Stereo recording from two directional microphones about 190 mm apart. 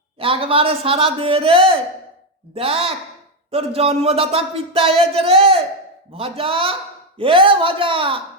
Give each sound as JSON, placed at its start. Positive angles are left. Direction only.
{"t": 0.2, "sound": "a man's voice", "side_deg": -30}
{"t": 3.5, "sound": "a sound", "side_deg": -30}
{"t": 6.1, "sound": "a man's voice", "side_deg": -30}